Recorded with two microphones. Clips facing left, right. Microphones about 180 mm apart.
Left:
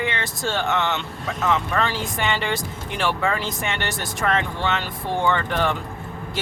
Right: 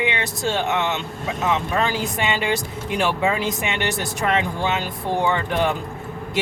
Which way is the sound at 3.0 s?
20° right (ahead or behind).